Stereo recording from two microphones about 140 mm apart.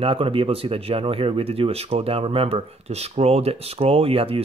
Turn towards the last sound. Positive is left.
turn(degrees=-40)  # may be behind; listen again after turning